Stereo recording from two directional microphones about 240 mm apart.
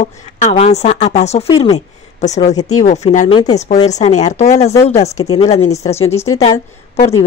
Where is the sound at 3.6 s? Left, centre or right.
Left.